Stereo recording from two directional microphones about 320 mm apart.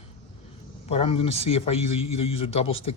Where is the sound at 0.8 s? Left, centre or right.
Centre.